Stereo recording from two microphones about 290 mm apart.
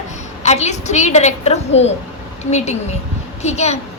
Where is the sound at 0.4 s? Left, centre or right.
Left.